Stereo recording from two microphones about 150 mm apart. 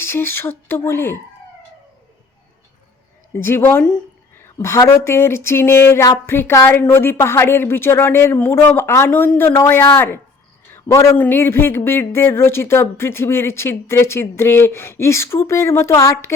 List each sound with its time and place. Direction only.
0.0 s speech: 15° left (ahead or behind)
3.3 s speech: 15° left (ahead or behind)
10.7 s a sound: 20° left (ahead or behind)
11.2 s speech: 15° left (ahead or behind)